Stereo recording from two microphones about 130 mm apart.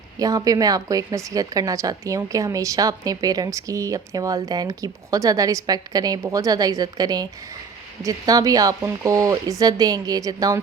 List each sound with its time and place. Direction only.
0.2 s a woman's voice: 30° right (ahead or behind)